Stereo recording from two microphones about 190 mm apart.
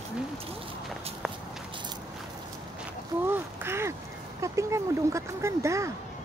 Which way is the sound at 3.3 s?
10° right (ahead or behind).